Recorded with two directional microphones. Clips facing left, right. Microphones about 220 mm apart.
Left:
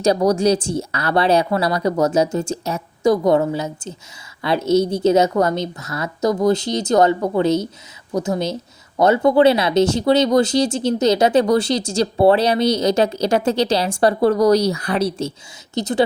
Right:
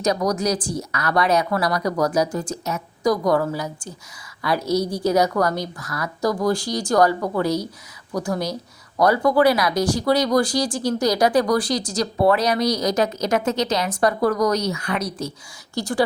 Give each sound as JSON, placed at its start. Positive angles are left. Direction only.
{"t": 0.0, "sound": "speech", "side_deg": 30}